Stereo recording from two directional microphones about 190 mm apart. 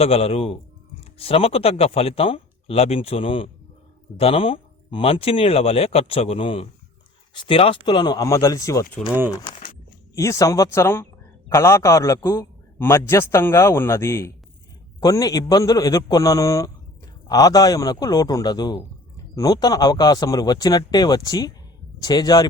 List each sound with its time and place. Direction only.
0.0 s a man's voice: 30° left (ahead or behind)